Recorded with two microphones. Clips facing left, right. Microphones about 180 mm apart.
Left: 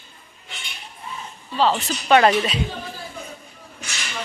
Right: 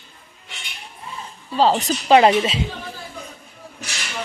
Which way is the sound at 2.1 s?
20° right (ahead or behind).